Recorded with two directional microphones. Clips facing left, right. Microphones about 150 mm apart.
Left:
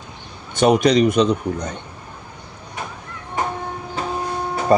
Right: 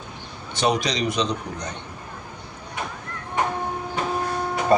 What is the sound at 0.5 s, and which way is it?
A man's voice, 50° left (ahead or behind).